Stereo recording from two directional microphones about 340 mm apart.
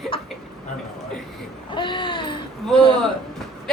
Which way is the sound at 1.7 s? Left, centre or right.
Centre.